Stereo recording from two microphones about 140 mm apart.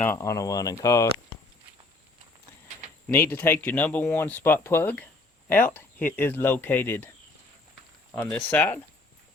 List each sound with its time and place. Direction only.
0.0 s speech: 20° left (ahead or behind)
3.1 s speech: 15° left (ahead or behind)
8.1 s speech: 10° left (ahead or behind)